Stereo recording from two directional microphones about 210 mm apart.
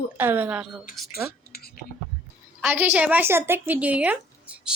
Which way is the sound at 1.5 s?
45° left (ahead or behind).